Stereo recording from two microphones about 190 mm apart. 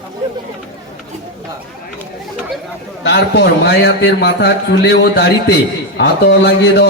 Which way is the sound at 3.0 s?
60° left (ahead or behind).